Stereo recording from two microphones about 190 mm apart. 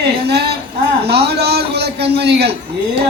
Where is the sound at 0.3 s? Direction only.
60° right (ahead or behind).